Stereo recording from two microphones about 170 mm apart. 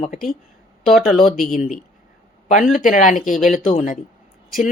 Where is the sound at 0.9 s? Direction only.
Centre (ahead or behind).